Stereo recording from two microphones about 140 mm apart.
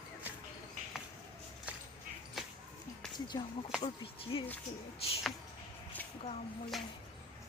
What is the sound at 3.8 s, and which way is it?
Speech, 40° left (ahead or behind).